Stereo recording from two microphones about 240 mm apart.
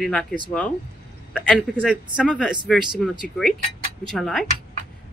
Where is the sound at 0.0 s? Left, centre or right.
Centre.